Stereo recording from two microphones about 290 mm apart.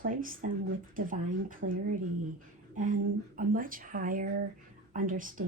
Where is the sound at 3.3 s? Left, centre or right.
Right.